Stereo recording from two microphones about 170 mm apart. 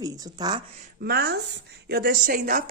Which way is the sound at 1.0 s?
65° right (ahead or behind).